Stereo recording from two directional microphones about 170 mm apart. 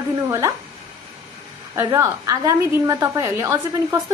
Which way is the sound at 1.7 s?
20° right (ahead or behind).